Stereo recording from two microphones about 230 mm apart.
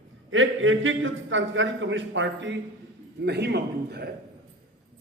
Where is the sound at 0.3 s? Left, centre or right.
Right.